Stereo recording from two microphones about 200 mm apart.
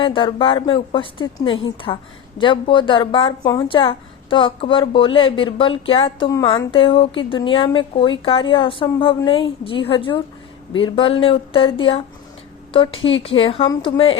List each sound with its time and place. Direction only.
0.0 s a woman's voice: 25° left (ahead or behind)